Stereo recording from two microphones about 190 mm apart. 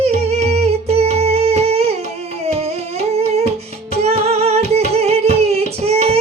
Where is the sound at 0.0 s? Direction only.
35° right (ahead or behind).